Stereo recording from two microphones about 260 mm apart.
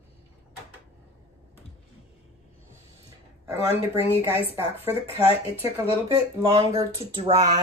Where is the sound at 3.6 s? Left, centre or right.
Left.